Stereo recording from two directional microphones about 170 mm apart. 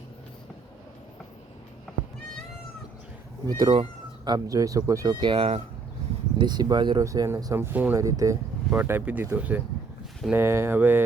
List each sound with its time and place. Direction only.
3.4 s speech: 25° right (ahead or behind)
6.4 s speech: 25° right (ahead or behind)